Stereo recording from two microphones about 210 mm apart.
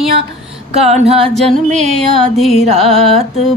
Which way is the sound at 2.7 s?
25° right (ahead or behind).